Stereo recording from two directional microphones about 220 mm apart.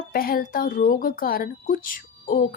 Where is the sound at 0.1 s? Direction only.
40° left (ahead or behind).